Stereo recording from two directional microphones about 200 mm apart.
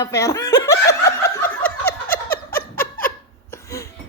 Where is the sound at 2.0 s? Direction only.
45° left (ahead or behind).